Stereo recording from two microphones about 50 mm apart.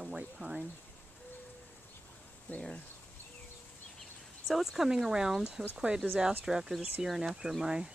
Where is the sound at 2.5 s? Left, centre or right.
Left.